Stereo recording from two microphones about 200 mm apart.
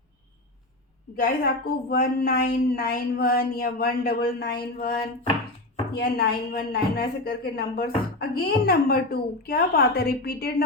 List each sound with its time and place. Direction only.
1.1 s speech: 50° left (ahead or behind)